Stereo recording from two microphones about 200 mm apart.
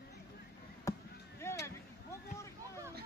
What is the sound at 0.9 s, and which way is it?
Basketball bounce, 15° left (ahead or behind).